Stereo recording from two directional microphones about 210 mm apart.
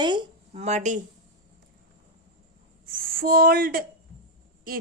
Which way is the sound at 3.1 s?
45° right (ahead or behind).